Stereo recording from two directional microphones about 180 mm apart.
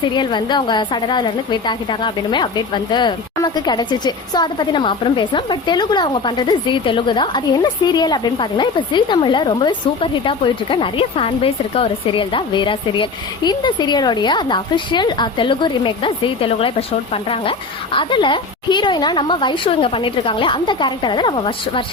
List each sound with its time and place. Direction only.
0.1 s a woman's voice: 25° left (ahead or behind)